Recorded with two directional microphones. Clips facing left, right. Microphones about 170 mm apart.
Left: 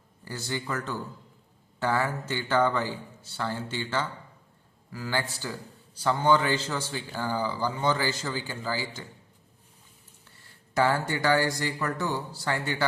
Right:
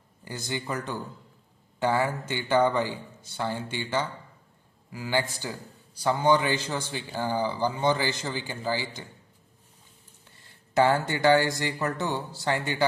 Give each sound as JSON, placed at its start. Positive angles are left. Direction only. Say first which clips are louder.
{"t": 0.3, "sound": "a man's voice", "louder": "even", "side_deg": -15}
{"t": 10.8, "sound": "speech", "louder": "right 3 dB", "side_deg": -20}